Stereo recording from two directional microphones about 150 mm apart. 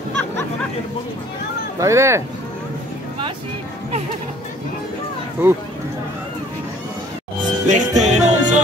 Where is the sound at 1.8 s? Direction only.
20° right (ahead or behind).